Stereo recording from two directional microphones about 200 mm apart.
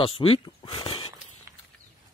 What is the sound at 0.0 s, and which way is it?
Speech, 25° left (ahead or behind).